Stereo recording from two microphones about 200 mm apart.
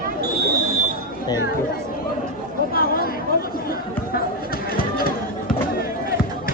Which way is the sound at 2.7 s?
45° left (ahead or behind).